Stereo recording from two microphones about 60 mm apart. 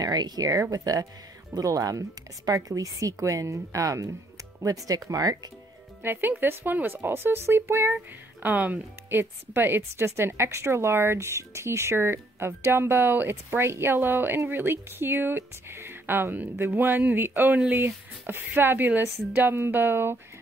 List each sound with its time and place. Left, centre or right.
0.0 s speech: right
1.5 s speech: right
6.0 s a woman's voice: right
8.4 s a woman's voice: right